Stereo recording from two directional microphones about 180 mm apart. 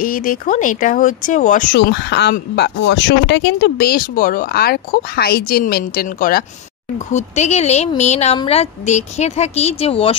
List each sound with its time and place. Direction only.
0.0 s speech: 50° left (ahead or behind)
1.8 s a woman's voice: 70° left (ahead or behind); by 10.1 s 30° left (ahead or behind)